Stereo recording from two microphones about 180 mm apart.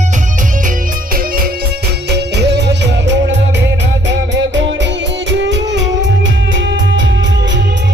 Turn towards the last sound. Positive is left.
turn(degrees=-85)